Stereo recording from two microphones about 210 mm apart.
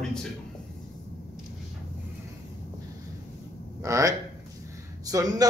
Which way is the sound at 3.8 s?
15° right (ahead or behind).